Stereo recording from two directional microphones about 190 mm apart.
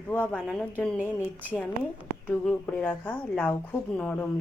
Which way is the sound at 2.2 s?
5° left (ahead or behind).